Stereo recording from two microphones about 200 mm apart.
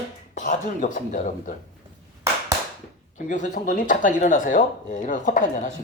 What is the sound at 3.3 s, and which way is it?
Speech, 40° left (ahead or behind).